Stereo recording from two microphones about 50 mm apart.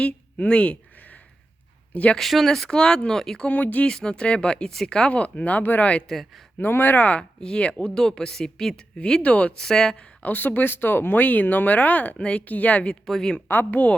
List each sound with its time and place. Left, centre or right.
0.0 s a sound: left
1.9 s speech: left
2.1 s speech: centre
3.4 s speech: left
3.8 s speech: centre; by 5.6 s left
6.1 s speech: centre
6.6 s speech: left
7.0 s speech: left; by 8.8 s centre
9.2 s speech: left
9.6 s speech: centre
10.2 s speech: left
13.1 s speech: centre
13.5 s speech: left